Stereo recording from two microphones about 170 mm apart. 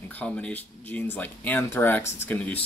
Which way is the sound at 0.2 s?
10° left (ahead or behind).